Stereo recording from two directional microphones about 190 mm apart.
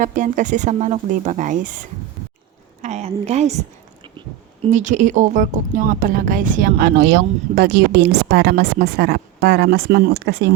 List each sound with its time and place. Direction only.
0.0 s a woman's voice: 40° right (ahead or behind)
2.8 s a woman's voice: 35° right (ahead or behind)
4.6 s speech: 40° right (ahead or behind); by 10.5 s 60° right (ahead or behind)